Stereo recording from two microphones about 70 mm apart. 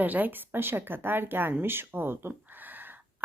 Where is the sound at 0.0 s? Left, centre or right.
Right.